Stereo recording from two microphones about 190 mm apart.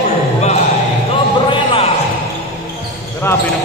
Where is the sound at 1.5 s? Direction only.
30° left (ahead or behind).